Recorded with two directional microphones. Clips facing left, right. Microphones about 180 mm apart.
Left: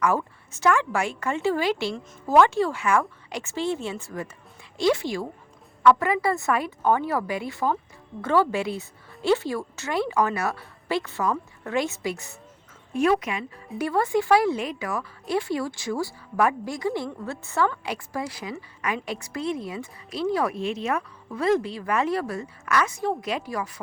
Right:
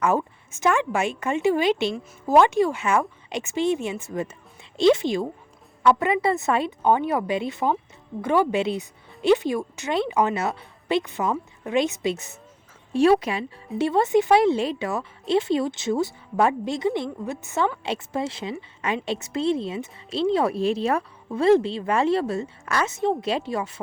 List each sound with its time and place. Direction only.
0.0 s a woman's voice: 20° right (ahead or behind)